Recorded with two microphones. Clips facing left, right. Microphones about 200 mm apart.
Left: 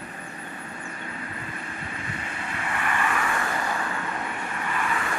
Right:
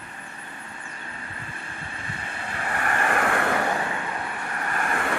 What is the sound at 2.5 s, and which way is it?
Vehicle, 40° right (ahead or behind).